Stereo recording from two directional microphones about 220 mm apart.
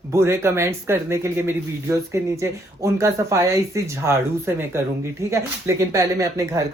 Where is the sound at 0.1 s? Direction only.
10° right (ahead or behind).